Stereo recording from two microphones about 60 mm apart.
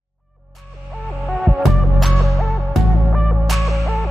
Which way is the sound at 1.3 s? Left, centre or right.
Centre.